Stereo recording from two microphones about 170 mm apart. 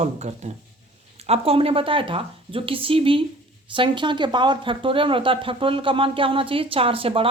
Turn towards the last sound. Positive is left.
turn(degrees=-35)  # may be behind; listen again after turning